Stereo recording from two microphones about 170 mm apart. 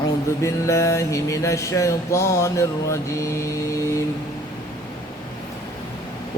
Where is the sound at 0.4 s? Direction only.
15° left (ahead or behind).